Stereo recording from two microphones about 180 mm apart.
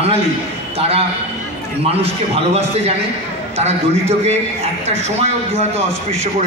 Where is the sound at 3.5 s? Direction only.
35° right (ahead or behind).